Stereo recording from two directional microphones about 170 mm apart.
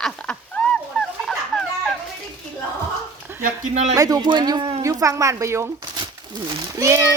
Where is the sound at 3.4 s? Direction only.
40° right (ahead or behind).